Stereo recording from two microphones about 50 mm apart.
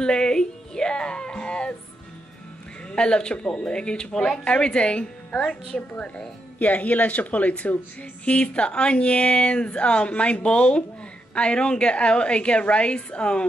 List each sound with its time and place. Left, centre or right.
0.0 s music: centre
2.9 s speech: centre